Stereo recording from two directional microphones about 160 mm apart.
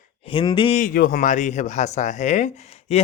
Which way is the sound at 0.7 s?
60° left (ahead or behind).